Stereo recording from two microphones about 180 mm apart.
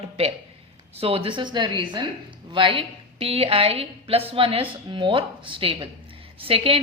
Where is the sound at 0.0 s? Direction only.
35° right (ahead or behind).